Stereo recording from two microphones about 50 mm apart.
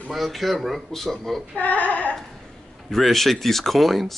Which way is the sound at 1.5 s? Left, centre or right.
Left.